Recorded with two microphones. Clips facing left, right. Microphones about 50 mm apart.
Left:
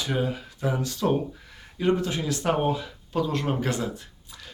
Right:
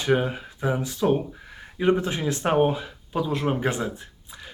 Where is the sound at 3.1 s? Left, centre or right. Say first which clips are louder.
Right 1 dB; centre.